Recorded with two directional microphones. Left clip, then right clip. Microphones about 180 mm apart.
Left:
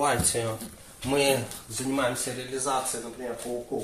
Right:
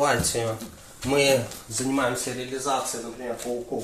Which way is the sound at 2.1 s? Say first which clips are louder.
Right 2 dB; centre (ahead or behind).